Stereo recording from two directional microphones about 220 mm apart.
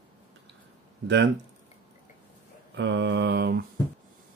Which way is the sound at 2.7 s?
55° right (ahead or behind).